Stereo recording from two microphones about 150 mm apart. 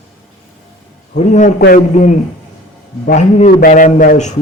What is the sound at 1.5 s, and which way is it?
Speech, 80° left.